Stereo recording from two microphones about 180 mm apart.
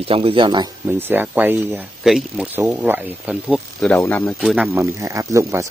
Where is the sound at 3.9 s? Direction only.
10° left (ahead or behind).